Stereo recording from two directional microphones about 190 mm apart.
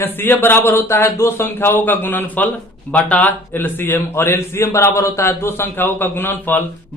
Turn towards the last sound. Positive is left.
turn(degrees=10)  # may be behind; listen again after turning